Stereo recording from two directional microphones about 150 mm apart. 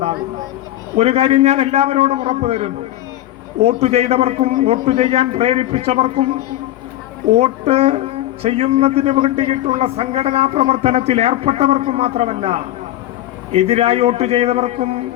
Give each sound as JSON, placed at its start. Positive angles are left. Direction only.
{"t": 0.9, "sound": "a man's voice", "side_deg": -45}
{"t": 7.3, "sound": "a man's voice", "side_deg": -45}